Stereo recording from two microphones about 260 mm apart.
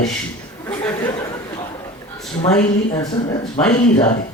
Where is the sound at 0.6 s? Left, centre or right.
Centre.